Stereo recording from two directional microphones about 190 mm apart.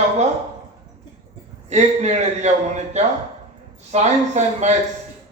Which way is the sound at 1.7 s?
35° right (ahead or behind).